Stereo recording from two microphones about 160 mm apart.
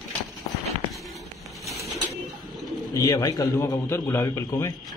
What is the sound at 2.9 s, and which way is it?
A man's voice, 20° left (ahead or behind).